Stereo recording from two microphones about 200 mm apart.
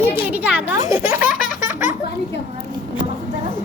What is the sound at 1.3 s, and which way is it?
Baby laughter, 40° left (ahead or behind).